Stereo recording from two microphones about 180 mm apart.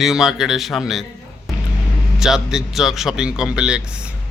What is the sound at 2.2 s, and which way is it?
A man's voice, centre (ahead or behind).